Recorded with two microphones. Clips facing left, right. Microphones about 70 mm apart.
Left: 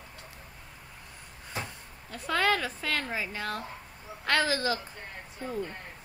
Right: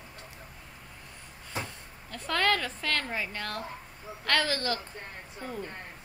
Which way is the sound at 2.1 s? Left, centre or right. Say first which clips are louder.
Left 1 dB; centre.